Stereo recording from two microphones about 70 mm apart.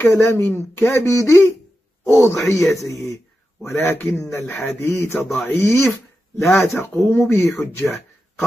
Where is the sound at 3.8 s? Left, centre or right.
Left.